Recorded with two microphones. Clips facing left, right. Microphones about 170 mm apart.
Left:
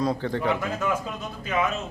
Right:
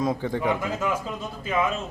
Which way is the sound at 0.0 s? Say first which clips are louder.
Even; 15° right (ahead or behind).